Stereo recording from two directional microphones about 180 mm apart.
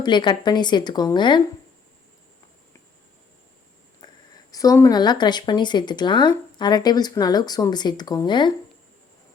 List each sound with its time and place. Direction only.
0.0 s speech: 25° left (ahead or behind)
4.0 s a sound: 25° left (ahead or behind)
4.5 s speech: 20° left (ahead or behind)